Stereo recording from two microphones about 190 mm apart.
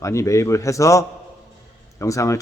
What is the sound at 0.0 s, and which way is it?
Speech, 15° left (ahead or behind).